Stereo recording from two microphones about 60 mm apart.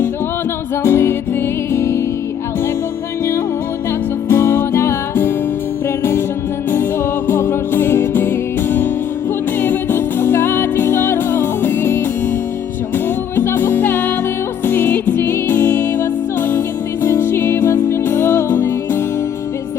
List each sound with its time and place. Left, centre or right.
0.9 s music: left
4.3 s music: left
7.3 s music: left
13.3 s music: left